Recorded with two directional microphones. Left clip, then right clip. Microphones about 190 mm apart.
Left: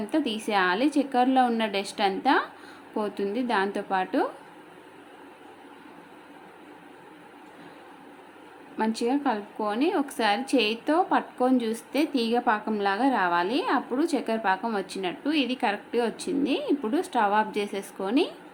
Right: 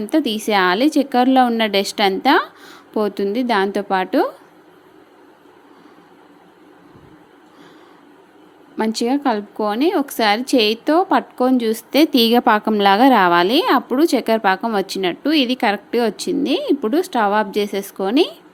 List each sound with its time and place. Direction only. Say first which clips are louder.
0.0 s a woman's voice: right 9 dB; 35° right (ahead or behind)
8.8 s a woman's voice: right 7 dB; 35° right (ahead or behind)